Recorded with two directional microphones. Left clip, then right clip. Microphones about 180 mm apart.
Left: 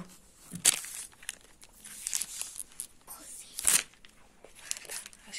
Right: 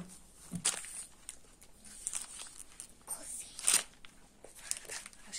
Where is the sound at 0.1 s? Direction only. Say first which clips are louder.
Even; 20° left (ahead or behind).